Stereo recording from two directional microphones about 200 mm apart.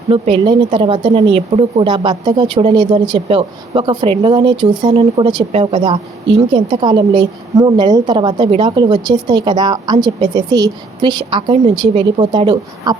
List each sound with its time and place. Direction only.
0.1 s a woman's voice: 25° right (ahead or behind)